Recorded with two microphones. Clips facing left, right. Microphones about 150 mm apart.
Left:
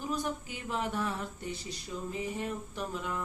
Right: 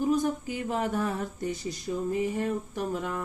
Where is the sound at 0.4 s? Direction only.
45° right (ahead or behind).